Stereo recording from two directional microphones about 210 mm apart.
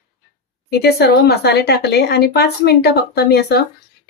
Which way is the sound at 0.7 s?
50° left (ahead or behind).